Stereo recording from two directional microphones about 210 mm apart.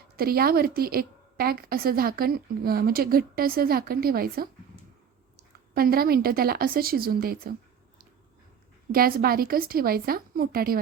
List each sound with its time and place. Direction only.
0.2 s a woman's voice: 45° right (ahead or behind)
8.9 s a woman's voice: 45° right (ahead or behind)